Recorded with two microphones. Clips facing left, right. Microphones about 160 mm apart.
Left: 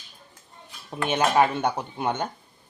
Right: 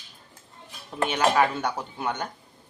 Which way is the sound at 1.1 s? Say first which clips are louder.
Left 2 dB; 25° left (ahead or behind).